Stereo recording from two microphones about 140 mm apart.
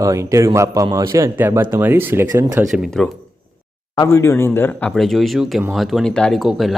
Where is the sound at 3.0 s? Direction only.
Centre (ahead or behind).